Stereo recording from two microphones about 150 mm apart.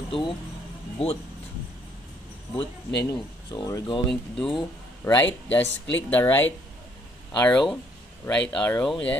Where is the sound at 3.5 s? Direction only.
25° left (ahead or behind).